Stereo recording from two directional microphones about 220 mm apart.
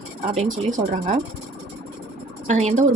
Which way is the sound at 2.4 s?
30° right (ahead or behind).